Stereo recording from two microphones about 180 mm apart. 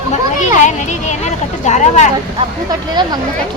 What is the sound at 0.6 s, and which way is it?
A child's voice, 40° left (ahead or behind).